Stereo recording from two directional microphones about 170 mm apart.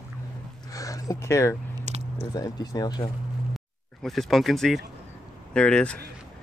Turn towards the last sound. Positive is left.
turn(degrees=5)  # may be behind; listen again after turning